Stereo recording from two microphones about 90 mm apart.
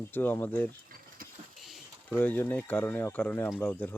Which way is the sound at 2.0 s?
20° left (ahead or behind).